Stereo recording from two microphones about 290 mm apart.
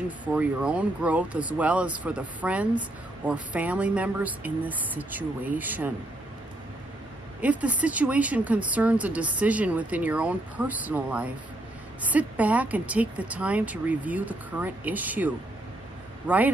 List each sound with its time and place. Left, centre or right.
0.2 s speech: centre
7.4 s speech: centre